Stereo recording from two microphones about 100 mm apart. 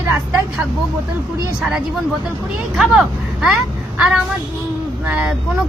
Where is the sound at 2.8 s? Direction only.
5° right (ahead or behind).